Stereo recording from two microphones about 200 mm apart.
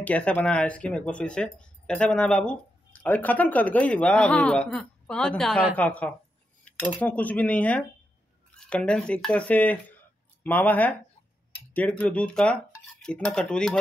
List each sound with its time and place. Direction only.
0.0 s speech: 5° left (ahead or behind)